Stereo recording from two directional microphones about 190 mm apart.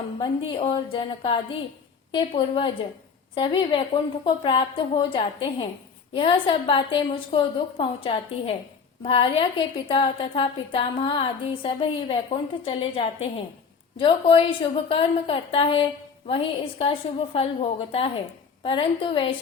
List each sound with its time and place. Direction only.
0.2 s a woman's voice: 25° left (ahead or behind)